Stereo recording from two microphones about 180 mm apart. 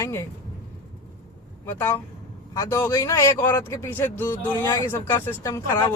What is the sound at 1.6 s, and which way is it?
Speech, 10° left (ahead or behind).